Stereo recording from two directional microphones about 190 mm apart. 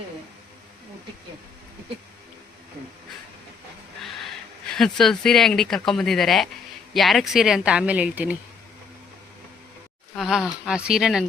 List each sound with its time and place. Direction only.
4.8 s speech: centre (ahead or behind)
10.2 s speech: centre (ahead or behind)